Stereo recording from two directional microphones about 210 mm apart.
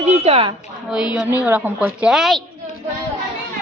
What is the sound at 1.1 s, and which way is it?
A woman's voice, 5° right (ahead or behind).